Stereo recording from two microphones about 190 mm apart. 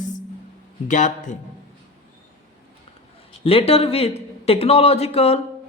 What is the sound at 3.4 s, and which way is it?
A woman's voice, 30° left (ahead or behind).